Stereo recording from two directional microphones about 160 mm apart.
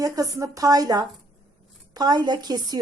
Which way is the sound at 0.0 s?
20° right (ahead or behind).